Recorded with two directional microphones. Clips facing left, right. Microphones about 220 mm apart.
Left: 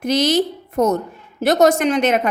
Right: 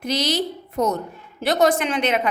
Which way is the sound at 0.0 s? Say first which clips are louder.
Left 6 dB; 50° left (ahead or behind).